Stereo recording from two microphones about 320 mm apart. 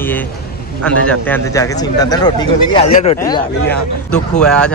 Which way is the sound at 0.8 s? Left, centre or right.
Centre.